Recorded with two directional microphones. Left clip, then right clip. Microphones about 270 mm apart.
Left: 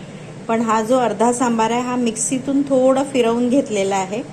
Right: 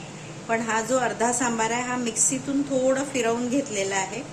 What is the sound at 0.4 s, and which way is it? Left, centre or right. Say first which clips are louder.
A woman's voice: left 7 dB; centre.